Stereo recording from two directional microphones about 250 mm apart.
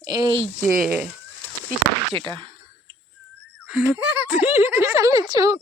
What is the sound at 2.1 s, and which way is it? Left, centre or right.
Speech, centre.